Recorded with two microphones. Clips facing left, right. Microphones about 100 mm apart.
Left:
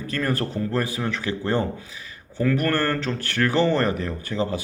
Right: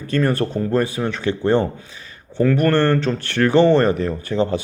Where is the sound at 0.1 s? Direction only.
25° right (ahead or behind).